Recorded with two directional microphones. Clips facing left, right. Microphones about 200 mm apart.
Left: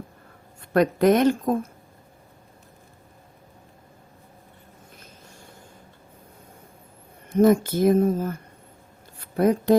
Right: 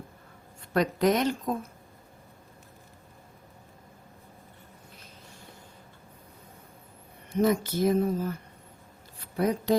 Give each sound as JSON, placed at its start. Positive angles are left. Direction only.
{"t": 0.7, "sound": "speech", "side_deg": 55}
{"t": 7.3, "sound": "speech", "side_deg": 50}